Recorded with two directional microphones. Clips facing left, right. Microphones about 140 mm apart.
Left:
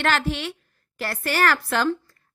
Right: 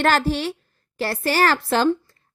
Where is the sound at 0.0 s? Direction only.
35° right (ahead or behind).